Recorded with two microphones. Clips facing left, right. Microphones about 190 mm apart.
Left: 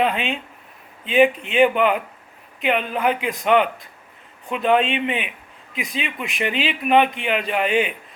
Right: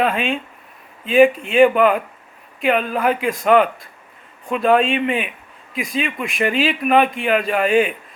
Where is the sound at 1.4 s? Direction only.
40° right (ahead or behind).